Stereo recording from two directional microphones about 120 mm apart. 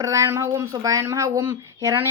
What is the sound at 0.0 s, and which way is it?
Speech, 25° right (ahead or behind).